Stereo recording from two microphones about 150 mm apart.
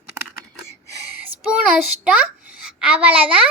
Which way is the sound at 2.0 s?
5° right (ahead or behind).